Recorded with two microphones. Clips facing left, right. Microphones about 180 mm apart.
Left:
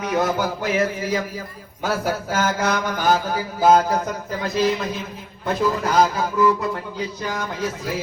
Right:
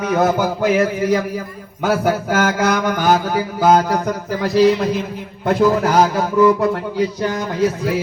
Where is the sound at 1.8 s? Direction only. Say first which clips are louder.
Right 6 dB; 65° right (ahead or behind).